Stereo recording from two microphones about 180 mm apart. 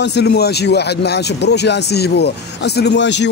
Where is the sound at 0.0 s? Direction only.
70° left (ahead or behind).